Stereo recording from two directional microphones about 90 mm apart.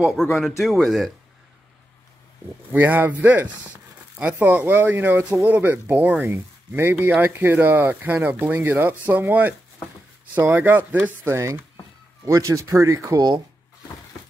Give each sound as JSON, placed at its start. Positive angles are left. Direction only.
{"t": 0.0, "sound": "speech", "side_deg": 0}
{"t": 2.7, "sound": "speech", "side_deg": -20}